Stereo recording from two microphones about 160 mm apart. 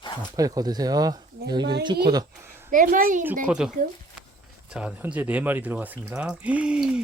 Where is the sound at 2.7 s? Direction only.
55° right (ahead or behind).